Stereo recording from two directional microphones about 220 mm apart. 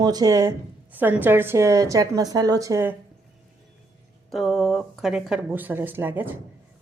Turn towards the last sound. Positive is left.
turn(degrees=-10)  # may be behind; listen again after turning